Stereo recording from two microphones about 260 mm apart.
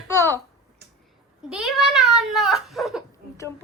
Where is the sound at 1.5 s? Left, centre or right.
Centre.